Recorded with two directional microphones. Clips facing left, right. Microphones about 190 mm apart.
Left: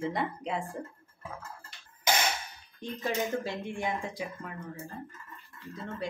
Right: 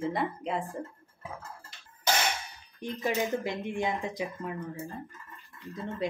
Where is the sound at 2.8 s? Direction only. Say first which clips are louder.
Right 2 dB; 15° right (ahead or behind).